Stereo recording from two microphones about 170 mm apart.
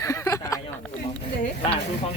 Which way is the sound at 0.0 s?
15° left (ahead or behind).